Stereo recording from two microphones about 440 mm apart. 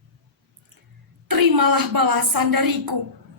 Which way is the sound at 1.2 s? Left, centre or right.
Right.